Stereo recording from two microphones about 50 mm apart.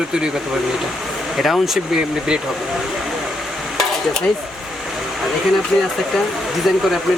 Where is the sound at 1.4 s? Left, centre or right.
Centre.